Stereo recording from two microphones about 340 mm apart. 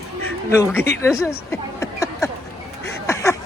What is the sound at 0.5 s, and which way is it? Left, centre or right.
Speech, centre.